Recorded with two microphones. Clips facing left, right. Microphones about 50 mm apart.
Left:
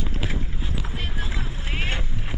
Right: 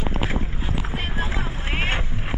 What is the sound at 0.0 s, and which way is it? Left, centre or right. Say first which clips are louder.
Clip-clop: right 4 dB; right.